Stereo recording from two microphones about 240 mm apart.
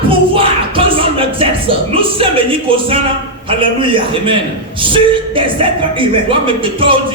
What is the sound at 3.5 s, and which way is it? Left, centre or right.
Speech, right.